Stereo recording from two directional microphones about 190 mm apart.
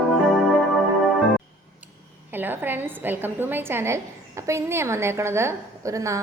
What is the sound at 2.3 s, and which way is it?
A woman's voice, 10° right (ahead or behind).